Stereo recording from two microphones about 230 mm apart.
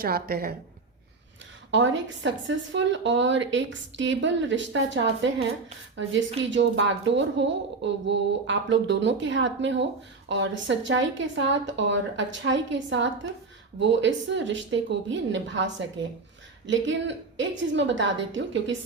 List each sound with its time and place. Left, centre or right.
0.0 s a woman's voice: right
1.7 s a woman's voice: right
6.5 s a woman's voice: right